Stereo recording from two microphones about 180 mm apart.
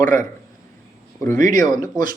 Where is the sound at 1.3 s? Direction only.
45° right (ahead or behind).